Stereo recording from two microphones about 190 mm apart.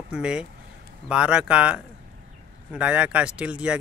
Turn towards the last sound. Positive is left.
turn(degrees=-5)  # may be behind; listen again after turning